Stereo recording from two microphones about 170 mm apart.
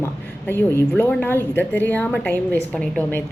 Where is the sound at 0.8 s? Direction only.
10° left (ahead or behind).